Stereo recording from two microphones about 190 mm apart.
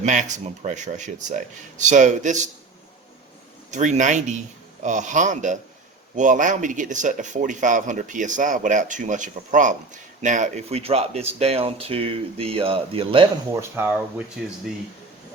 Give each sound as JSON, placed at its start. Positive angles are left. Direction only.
{"t": 0.0, "sound": "speech", "side_deg": -40}
{"t": 3.7, "sound": "speech", "side_deg": -40}
{"t": 13.5, "sound": "speech", "side_deg": -15}